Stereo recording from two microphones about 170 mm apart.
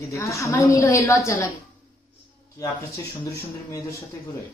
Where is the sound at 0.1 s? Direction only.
20° left (ahead or behind).